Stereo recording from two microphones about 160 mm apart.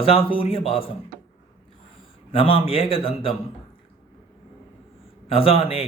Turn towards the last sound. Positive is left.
turn(degrees=35)  # may be behind; listen again after turning